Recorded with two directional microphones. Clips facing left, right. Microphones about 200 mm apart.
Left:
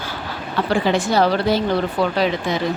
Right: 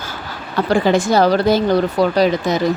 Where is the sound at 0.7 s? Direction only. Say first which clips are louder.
Right 4 dB; 45° right (ahead or behind).